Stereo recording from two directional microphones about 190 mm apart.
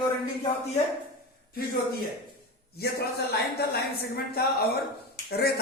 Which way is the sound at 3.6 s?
55° left (ahead or behind).